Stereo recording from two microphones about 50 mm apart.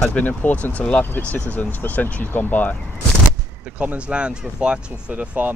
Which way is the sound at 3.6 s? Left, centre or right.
Right.